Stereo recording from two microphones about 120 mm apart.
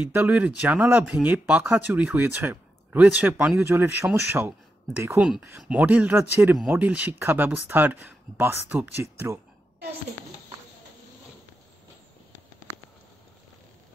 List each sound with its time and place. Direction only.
0.1 s speech: 15° right (ahead or behind)